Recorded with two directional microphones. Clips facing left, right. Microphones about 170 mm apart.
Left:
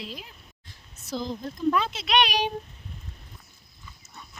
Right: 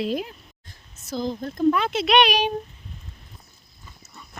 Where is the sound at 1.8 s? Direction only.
65° right (ahead or behind).